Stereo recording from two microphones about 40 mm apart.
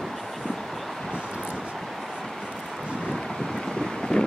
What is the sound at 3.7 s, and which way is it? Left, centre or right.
Boat, centre.